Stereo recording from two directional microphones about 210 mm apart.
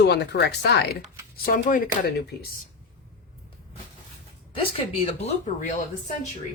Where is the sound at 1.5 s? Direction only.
40° left (ahead or behind).